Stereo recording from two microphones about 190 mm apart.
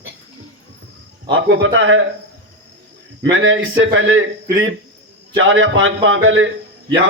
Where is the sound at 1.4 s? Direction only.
90° right.